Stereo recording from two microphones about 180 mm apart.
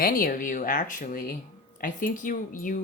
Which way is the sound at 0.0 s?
50° left (ahead or behind).